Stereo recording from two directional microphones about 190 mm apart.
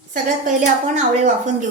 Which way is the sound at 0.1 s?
40° right (ahead or behind).